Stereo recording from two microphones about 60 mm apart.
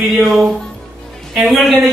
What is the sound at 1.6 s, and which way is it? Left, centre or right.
Speech, centre.